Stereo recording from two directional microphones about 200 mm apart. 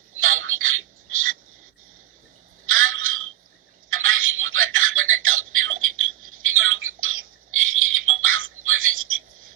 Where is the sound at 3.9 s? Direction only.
90° right.